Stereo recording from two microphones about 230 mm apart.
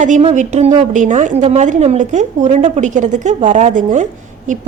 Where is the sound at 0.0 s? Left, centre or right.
Right.